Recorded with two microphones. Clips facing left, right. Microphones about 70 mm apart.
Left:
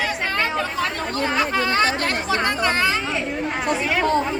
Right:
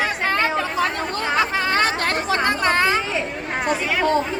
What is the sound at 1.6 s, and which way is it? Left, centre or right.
Chatter, right.